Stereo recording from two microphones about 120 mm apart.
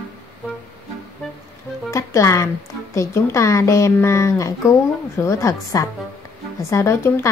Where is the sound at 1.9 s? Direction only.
25° left (ahead or behind).